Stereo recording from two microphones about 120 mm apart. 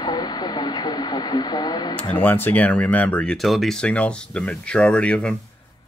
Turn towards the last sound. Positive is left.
turn(degrees=10)  # may be behind; listen again after turning